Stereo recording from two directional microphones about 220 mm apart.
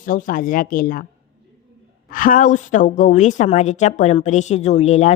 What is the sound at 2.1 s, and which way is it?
A woman's voice, 35° left (ahead or behind).